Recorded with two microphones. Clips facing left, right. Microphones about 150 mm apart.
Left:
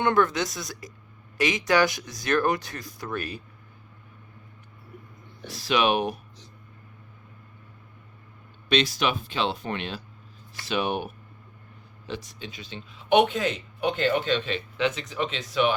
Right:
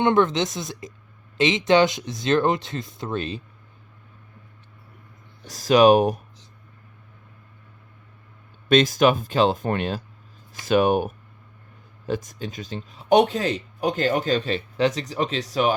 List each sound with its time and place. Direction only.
0.0 s speech: 20° right (ahead or behind)
5.5 s speech: 40° right (ahead or behind)
8.7 s speech: 45° right (ahead or behind)